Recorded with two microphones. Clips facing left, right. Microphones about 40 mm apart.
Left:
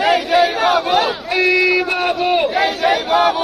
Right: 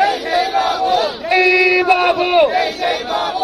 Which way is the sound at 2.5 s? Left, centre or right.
Left.